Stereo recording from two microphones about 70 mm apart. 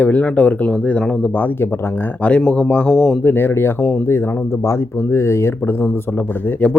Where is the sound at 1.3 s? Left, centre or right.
Left.